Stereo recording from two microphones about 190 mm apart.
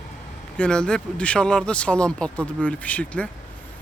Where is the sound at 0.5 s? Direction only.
5° left (ahead or behind).